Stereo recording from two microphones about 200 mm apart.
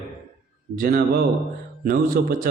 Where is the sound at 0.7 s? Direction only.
50° right (ahead or behind).